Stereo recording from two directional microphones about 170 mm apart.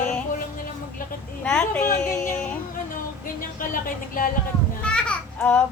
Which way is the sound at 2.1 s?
15° left (ahead or behind).